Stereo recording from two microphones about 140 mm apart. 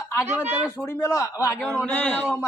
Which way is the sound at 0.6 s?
20° left (ahead or behind).